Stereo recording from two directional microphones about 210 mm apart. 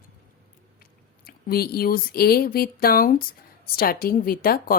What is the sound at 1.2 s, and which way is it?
Speech, 45° left (ahead or behind).